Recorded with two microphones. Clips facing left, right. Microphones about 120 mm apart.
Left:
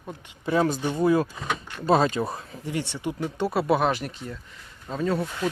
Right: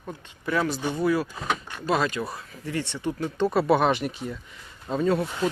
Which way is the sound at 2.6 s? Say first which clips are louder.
Right 1 dB; 15° left (ahead or behind).